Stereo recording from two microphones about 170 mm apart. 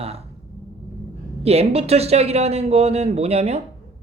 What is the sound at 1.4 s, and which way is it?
Speech, 35° right (ahead or behind).